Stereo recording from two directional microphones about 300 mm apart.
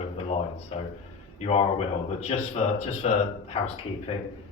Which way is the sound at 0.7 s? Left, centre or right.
Centre.